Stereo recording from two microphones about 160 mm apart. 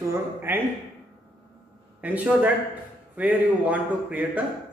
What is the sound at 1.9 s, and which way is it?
A man's voice, 10° right (ahead or behind).